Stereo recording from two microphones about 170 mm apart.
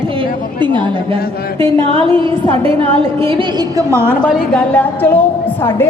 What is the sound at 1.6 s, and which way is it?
Music, 30° right (ahead or behind).